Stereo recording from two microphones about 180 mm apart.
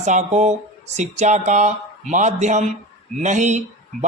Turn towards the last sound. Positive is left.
turn(degrees=-40)  # may be behind; listen again after turning